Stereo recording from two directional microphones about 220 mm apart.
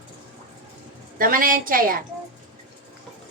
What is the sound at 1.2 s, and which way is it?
Speech, 40° right (ahead or behind).